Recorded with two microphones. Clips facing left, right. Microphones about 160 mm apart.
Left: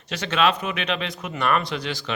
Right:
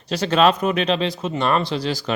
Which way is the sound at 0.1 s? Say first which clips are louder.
Right 5 dB; 35° right (ahead or behind).